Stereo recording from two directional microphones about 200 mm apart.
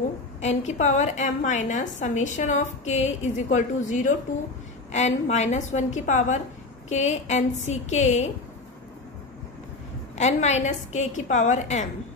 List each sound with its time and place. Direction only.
0.4 s a woman's voice: 35° left (ahead or behind)
10.1 s a woman's voice: 35° left (ahead or behind)